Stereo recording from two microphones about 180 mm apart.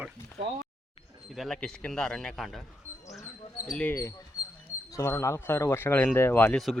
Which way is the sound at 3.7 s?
10° left (ahead or behind).